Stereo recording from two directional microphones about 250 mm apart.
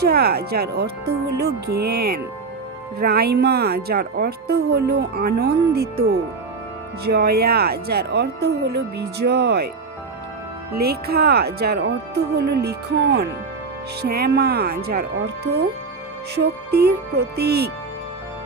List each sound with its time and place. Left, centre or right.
0.0 s speech: right
7.1 s speech: right
10.7 s speech: right